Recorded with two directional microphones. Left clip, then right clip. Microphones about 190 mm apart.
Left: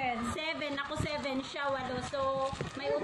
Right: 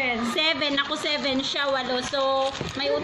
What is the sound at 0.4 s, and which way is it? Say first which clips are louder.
A woman's voice: right 12 dB; 5° right (ahead or behind).